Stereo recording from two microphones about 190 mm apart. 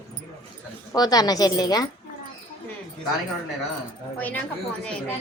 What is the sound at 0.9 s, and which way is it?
Speech, 20° left (ahead or behind).